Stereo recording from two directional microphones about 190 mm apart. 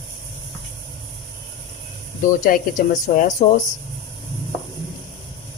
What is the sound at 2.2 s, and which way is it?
Speech, 45° left (ahead or behind).